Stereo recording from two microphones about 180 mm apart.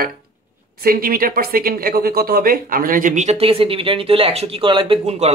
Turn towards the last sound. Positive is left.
turn(degrees=-35)  # may be behind; listen again after turning